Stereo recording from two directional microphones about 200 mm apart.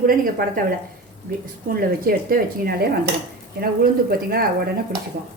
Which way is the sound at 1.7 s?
45° right (ahead or behind).